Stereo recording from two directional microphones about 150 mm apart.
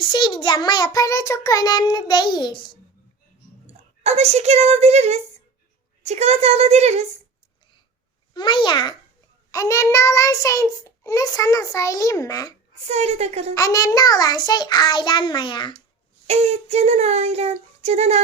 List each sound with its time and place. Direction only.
0.1 s child singing: 30° left (ahead or behind)
3.7 s speech: 45° right (ahead or behind)
8.3 s a child's voice: 30° left (ahead or behind)
9.5 s child singing: 20° left (ahead or behind)
12.8 s speech: 45° right (ahead or behind)
13.5 s child singing: 25° left (ahead or behind)
16.2 s speech: 45° right (ahead or behind)